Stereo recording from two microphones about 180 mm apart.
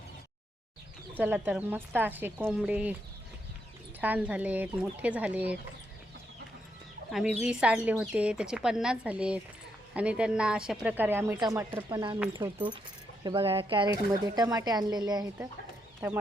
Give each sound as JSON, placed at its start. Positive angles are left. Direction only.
{"t": 1.2, "sound": "speech", "side_deg": -10}
{"t": 4.0, "sound": "speech", "side_deg": -10}
{"t": 7.1, "sound": "speech", "side_deg": -5}